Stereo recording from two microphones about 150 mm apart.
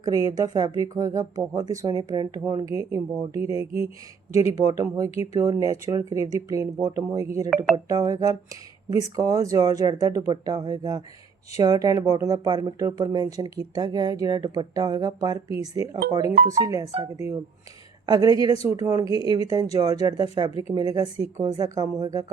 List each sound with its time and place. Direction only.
0.0 s speech: 25° right (ahead or behind)